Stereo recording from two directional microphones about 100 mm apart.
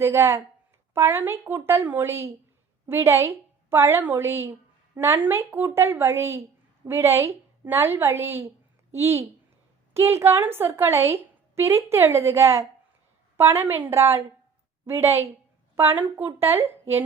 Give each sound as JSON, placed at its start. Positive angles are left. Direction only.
{"t": 0.0, "sound": "a woman's voice", "side_deg": -25}